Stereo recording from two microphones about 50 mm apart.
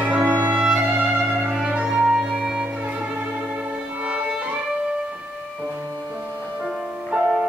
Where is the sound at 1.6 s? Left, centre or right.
Centre.